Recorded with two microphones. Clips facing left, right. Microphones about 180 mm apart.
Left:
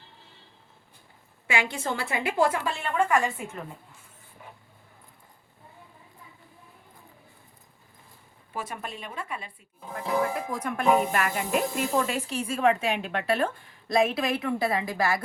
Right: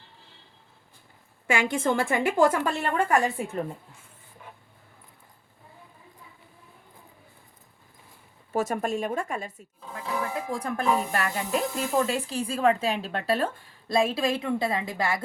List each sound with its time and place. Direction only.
1.5 s a woman's voice: 50° right (ahead or behind)
8.5 s a woman's voice: 45° right (ahead or behind)
9.8 s speech: 20° left (ahead or behind)
10.3 s speech: 30° right (ahead or behind)